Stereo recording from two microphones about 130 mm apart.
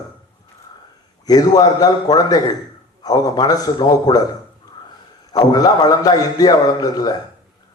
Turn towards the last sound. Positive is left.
turn(degrees=30)  # may be behind; listen again after turning